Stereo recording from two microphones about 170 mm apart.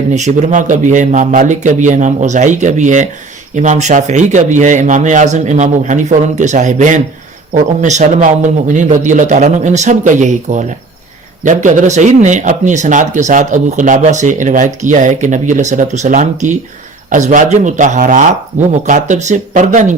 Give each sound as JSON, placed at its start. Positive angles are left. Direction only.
{"t": 0.1, "sound": "speech", "side_deg": -45}